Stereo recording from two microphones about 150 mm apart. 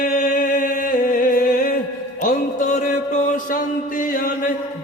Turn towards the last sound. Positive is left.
turn(degrees=65)  # may be behind; listen again after turning